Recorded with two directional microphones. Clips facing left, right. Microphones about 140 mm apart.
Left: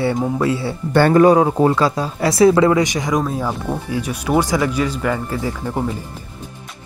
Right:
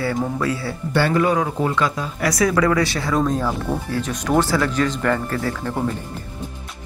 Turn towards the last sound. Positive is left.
turn(degrees=10)  # may be behind; listen again after turning